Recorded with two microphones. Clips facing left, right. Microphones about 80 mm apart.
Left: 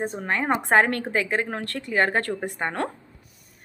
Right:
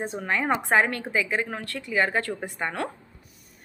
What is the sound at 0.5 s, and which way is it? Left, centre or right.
Speech, left.